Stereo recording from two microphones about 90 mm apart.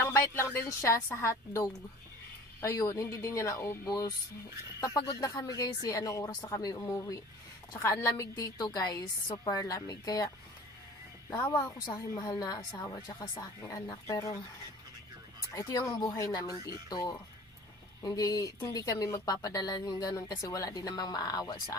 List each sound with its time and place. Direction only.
0.0 s speech: 25° left (ahead or behind); by 6.7 s 45° left (ahead or behind)
7.8 s speech: 35° left (ahead or behind)
11.3 s speech: 45° left (ahead or behind)
13.4 s speech: 40° left (ahead or behind)
15.5 s speech: 35° left (ahead or behind)